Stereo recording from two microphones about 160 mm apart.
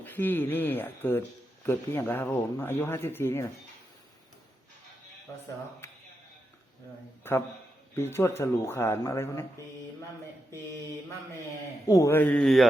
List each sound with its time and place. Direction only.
0.0 s speech: 10° left (ahead or behind)
7.9 s speech: 15° left (ahead or behind)
11.9 s speech: 20° left (ahead or behind); by 12.6 s 5° left (ahead or behind)